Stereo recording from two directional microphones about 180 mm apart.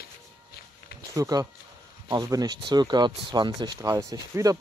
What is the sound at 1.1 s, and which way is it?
Speech, 15° right (ahead or behind).